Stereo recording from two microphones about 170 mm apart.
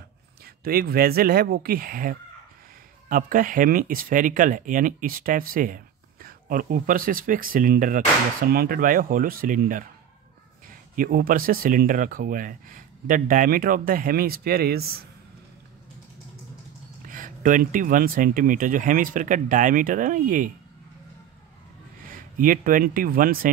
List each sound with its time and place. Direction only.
0.7 s speech: 60° right (ahead or behind)
17.1 s speech: 50° right (ahead or behind)
22.1 s speech: 55° right (ahead or behind)